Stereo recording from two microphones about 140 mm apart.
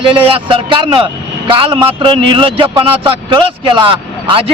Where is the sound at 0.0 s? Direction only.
40° right (ahead or behind).